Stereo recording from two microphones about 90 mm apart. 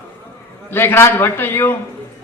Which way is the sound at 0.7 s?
25° left (ahead or behind).